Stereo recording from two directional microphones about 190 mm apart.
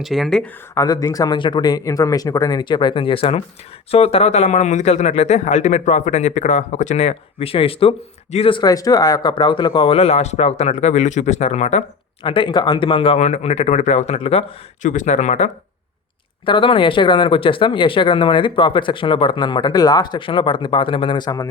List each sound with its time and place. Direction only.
0.0 s speech: centre (ahead or behind)
0.7 s speech: 15° left (ahead or behind); by 15.4 s 40° left (ahead or behind)
16.5 s speech: 25° left (ahead or behind)